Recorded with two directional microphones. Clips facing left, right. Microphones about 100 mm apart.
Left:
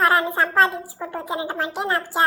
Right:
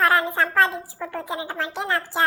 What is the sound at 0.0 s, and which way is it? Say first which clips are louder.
Speech: left 1 dB; 20° left (ahead or behind).